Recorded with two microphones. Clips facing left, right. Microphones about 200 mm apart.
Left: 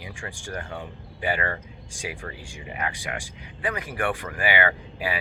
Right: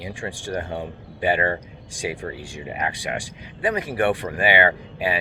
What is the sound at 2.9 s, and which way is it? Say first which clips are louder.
Speech: right 5 dB; 30° right (ahead or behind).